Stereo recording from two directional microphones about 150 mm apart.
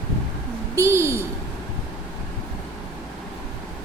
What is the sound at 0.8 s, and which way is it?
Speech, 20° right (ahead or behind).